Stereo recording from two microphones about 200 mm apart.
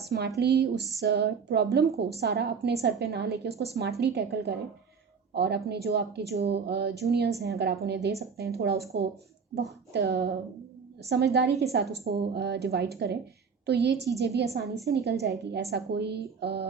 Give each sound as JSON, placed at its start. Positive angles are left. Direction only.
{"t": 0.0, "sound": "a woman's voice", "side_deg": -55}
{"t": 9.9, "sound": "a woman's voice", "side_deg": -55}